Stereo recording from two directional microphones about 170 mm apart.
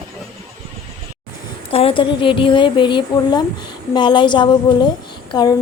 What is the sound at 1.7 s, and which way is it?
A woman's voice, 30° left (ahead or behind).